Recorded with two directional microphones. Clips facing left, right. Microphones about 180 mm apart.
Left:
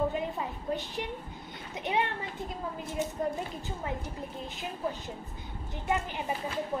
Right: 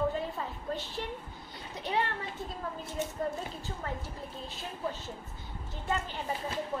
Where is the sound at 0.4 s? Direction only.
15° left (ahead or behind).